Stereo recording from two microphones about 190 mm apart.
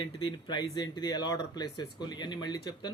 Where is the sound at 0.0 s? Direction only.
25° left (ahead or behind).